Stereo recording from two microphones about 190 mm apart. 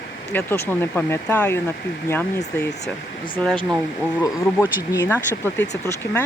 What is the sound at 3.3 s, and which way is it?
Speech, 5° left (ahead or behind).